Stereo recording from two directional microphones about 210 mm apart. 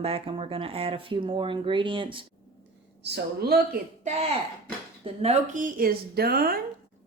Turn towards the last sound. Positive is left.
turn(degrees=-45)  # may be behind; listen again after turning